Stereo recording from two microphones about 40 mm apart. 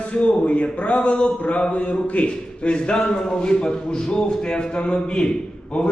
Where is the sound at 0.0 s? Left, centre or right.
Left.